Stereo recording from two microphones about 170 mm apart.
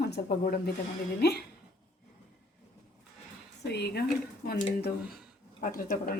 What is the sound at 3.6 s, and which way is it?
Speech, 75° left (ahead or behind).